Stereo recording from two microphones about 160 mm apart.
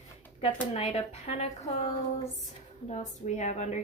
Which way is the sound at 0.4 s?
40° left (ahead or behind).